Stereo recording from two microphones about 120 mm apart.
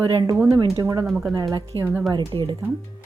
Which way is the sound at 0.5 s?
30° right (ahead or behind).